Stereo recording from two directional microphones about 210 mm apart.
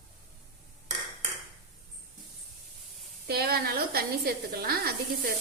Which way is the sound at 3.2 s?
50° right (ahead or behind).